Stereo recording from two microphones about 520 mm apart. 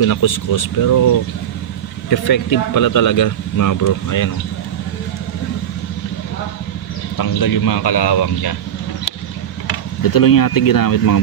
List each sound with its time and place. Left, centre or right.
0.0 s speech: left
2.0 s speech: left
7.2 s a man's voice: left
10.0 s speech: left